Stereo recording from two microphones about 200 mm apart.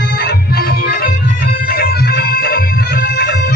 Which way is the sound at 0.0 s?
60° left (ahead or behind).